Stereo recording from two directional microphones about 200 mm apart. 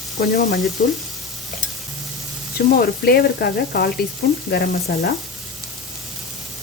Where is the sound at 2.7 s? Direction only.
50° left (ahead or behind).